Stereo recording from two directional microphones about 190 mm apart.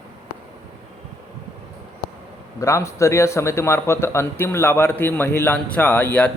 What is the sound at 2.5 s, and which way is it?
A man's voice, 15° left (ahead or behind).